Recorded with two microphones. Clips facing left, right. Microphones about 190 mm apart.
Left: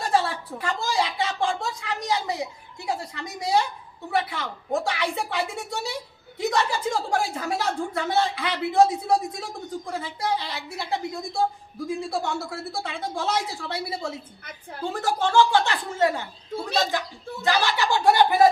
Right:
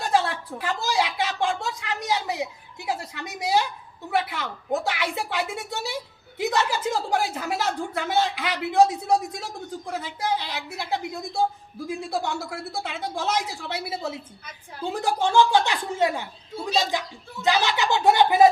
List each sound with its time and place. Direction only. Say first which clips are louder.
0.0 s a sound: even; centre (ahead or behind)
4.1 s a woman's voice: even; centre (ahead or behind)
17.4 s speech: right 1 dB; 20° right (ahead or behind)